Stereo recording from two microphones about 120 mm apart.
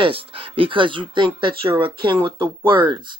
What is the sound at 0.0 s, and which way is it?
Speech, 45° right (ahead or behind).